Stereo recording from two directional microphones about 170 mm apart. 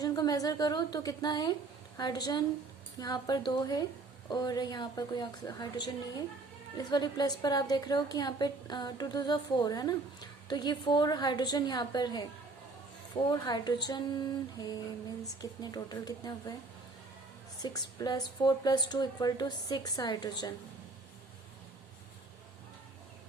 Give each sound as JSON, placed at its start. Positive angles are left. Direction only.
{"t": 0.0, "sound": "a woman's voice", "side_deg": 20}
{"t": 13.3, "sound": "a woman's voice", "side_deg": 25}
{"t": 17.6, "sound": "a woman's voice", "side_deg": 25}